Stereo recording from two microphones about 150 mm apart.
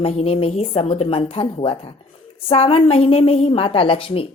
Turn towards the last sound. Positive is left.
turn(degrees=35)  # may be behind; listen again after turning